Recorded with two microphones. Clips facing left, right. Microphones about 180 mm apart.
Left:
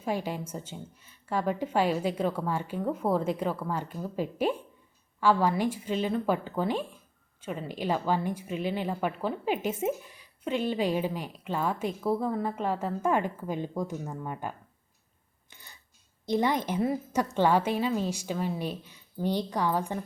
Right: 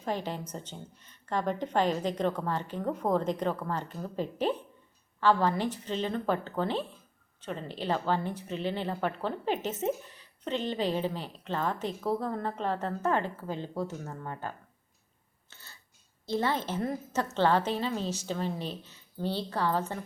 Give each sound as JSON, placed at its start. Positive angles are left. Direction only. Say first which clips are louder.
{"t": 0.0, "sound": "speech", "louder": "left 2 dB", "side_deg": 10}
{"t": 15.4, "sound": "a sound", "louder": "left 1 dB", "side_deg": 15}
{"t": 16.2, "sound": "speech", "louder": "left 3 dB", "side_deg": 15}